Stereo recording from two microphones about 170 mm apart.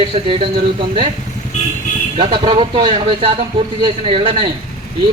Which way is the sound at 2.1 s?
35° right (ahead or behind).